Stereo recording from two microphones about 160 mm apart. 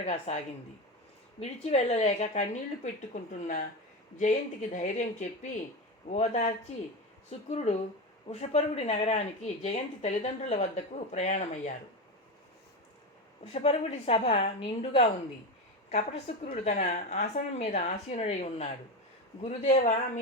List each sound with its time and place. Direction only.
0.0 s speech: 45° left (ahead or behind)
1.4 s speech: 40° left (ahead or behind)
13.4 s a woman's voice: 40° left (ahead or behind)